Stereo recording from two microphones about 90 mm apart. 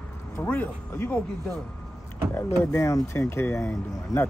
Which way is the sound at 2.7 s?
35° left (ahead or behind).